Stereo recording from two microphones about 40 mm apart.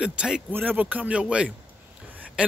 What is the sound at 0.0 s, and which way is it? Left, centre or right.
Speech, right.